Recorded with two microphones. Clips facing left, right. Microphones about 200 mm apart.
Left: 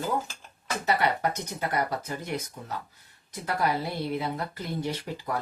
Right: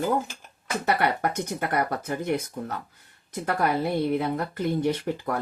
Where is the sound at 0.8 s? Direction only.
55° right (ahead or behind).